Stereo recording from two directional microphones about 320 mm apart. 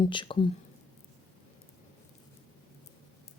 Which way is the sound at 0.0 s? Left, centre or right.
Centre.